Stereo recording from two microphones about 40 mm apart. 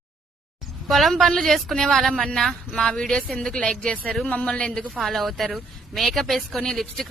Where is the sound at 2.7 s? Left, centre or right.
Left.